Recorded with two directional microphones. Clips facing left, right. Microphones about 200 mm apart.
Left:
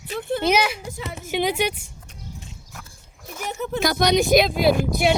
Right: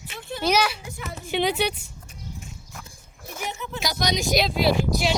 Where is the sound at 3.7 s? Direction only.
55° left (ahead or behind).